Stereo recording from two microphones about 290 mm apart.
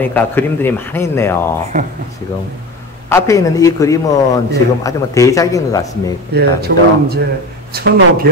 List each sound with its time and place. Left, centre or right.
0.0 s a man's voice: centre
3.1 s a man's voice: centre
6.3 s speech: right